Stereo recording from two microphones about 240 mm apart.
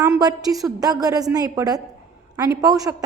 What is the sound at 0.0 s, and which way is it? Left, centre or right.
A woman's voice, centre.